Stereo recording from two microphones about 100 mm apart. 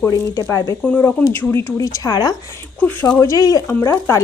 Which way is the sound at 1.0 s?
25° left (ahead or behind).